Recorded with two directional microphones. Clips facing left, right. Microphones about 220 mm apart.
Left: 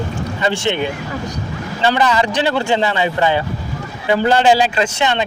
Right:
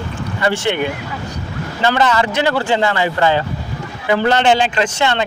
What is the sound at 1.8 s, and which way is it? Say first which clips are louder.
A man's voice: even; 15° left (ahead or behind).